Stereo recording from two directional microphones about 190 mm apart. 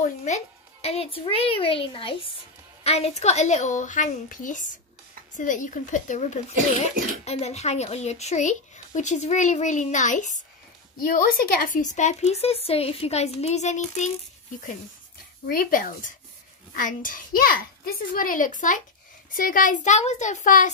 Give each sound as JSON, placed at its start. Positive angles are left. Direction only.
{"t": 0.3, "sound": "a child's voice", "side_deg": 40}
{"t": 15.4, "sound": "a child's voice", "side_deg": 50}